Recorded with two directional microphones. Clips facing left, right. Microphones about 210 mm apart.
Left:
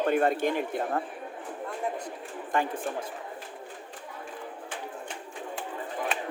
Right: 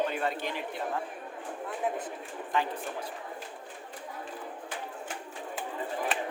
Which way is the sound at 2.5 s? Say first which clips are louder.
Left 2 dB; 50° left (ahead or behind).